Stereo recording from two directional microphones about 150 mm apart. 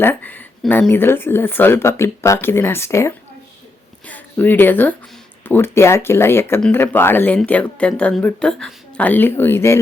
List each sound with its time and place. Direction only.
0.0 s speech: 15° left (ahead or behind)